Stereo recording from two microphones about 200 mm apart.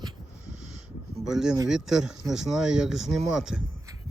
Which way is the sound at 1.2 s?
Centre (ahead or behind).